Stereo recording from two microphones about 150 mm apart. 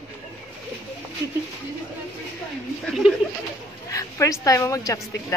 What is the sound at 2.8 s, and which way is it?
Speech, centre (ahead or behind).